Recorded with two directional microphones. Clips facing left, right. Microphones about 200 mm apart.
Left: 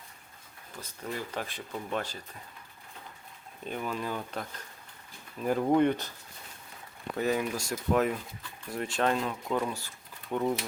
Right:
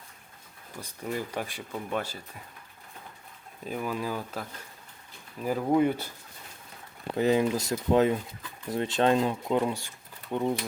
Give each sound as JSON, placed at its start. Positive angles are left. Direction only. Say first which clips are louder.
{"t": 0.8, "sound": "speech", "louder": "right 4 dB", "side_deg": -15}
{"t": 3.6, "sound": "speech", "louder": "right 2 dB", "side_deg": -5}
{"t": 7.2, "sound": "speech", "louder": "right 5 dB", "side_deg": -25}